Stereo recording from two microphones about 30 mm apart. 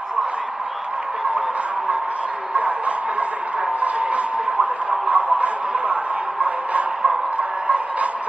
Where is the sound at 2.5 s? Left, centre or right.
Right.